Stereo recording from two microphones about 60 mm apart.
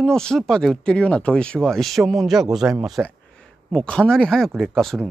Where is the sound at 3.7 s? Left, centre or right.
Centre.